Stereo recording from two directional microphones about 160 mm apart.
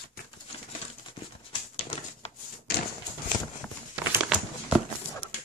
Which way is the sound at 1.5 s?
35° left (ahead or behind).